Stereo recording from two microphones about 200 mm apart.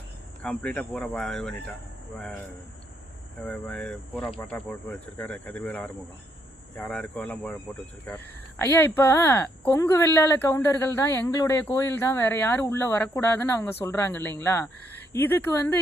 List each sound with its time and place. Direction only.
0.4 s speech: 5° left (ahead or behind)
3.4 s speech: 5° left (ahead or behind)